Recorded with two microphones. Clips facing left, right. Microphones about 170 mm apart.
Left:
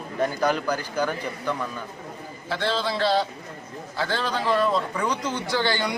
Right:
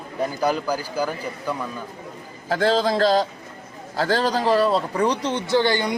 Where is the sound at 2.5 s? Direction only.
45° right (ahead or behind).